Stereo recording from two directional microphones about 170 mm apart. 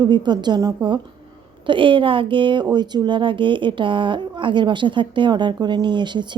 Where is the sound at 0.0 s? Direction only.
25° right (ahead or behind).